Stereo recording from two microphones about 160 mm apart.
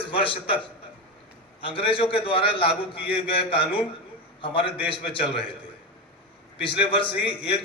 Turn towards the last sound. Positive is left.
turn(degrees=35)  # may be behind; listen again after turning